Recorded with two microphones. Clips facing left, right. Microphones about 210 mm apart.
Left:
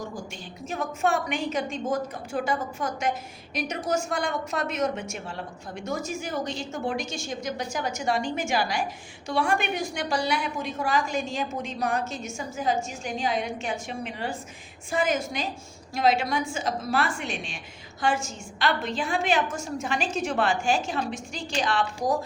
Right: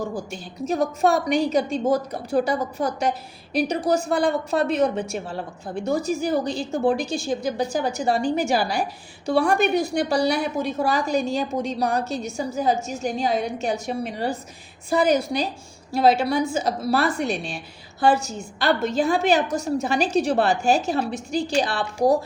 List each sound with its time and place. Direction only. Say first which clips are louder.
0.2 s a woman's voice: right 7 dB; 40° right (ahead or behind)